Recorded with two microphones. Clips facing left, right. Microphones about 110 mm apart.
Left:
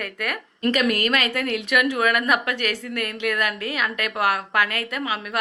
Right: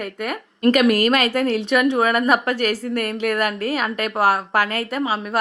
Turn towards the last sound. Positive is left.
turn(degrees=-35)  # may be behind; listen again after turning